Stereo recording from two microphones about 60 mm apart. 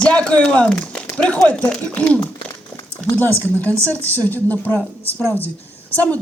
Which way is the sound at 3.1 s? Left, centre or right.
Left.